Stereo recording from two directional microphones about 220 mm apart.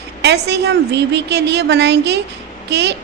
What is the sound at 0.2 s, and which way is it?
A woman's voice, 50° right (ahead or behind).